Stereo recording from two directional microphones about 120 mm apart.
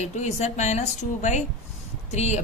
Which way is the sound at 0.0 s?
75° left (ahead or behind).